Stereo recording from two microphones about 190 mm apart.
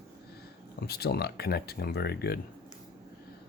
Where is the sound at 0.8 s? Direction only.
55° left (ahead or behind).